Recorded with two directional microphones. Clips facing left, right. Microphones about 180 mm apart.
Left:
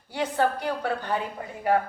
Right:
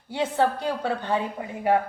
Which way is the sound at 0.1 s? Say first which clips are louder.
Right 2 dB; 20° right (ahead or behind).